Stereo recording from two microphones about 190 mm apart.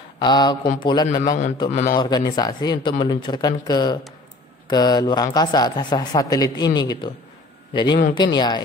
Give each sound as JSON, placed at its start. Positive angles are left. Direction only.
{"t": 0.2, "sound": "speech", "side_deg": 25}
{"t": 1.7, "sound": "a man's voice", "side_deg": 40}
{"t": 2.0, "sound": "a man's voice", "side_deg": 20}